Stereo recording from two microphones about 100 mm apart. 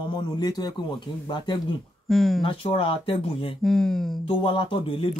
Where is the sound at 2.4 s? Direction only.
65° left (ahead or behind).